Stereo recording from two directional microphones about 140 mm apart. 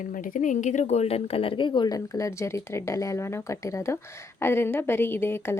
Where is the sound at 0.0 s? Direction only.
75° left (ahead or behind).